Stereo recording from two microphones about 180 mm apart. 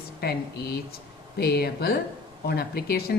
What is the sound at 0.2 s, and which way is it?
Speech, 60° left (ahead or behind).